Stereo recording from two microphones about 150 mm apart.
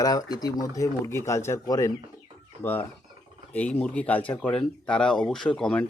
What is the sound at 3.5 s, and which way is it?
Speech, 10° left (ahead or behind).